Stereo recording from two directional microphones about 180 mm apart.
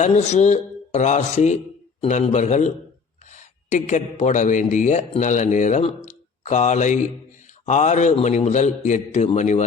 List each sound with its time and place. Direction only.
0.0 s a man's voice: 40° left (ahead or behind)